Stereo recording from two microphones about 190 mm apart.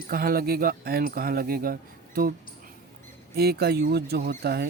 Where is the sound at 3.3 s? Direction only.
55° right (ahead or behind).